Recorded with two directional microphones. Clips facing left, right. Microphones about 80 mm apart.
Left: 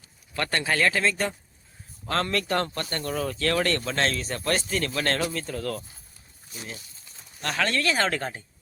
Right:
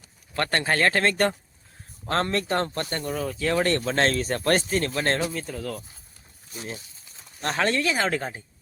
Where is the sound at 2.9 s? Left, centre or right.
Centre.